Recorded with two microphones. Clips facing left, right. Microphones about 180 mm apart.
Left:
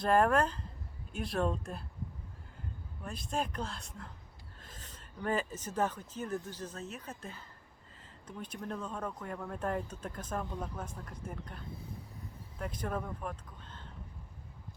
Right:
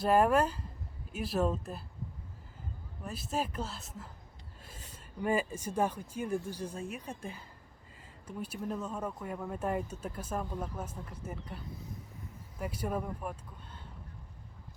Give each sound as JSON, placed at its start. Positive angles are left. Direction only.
{"t": 0.0, "sound": "speech", "side_deg": -5}
{"t": 3.0, "sound": "speech", "side_deg": -5}